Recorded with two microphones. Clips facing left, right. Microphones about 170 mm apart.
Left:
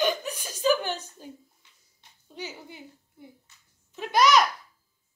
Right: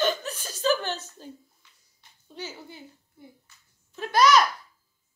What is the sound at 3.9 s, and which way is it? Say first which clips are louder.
Babbling: right 1 dB; 15° left (ahead or behind).